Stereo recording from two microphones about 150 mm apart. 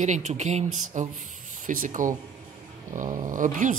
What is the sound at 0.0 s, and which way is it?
Speech, 50° right (ahead or behind).